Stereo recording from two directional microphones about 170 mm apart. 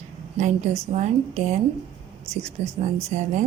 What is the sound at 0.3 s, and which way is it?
A woman's voice, 45° right (ahead or behind).